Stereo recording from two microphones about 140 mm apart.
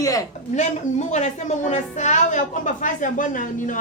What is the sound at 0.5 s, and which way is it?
A woman's voice, 55° left (ahead or behind).